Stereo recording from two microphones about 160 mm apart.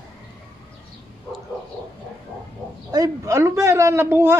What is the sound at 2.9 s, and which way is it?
Speech, 20° right (ahead or behind).